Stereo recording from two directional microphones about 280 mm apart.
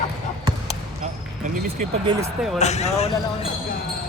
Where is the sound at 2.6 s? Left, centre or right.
Left.